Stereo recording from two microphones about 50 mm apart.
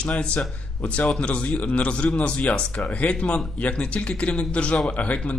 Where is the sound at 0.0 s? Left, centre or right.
Left.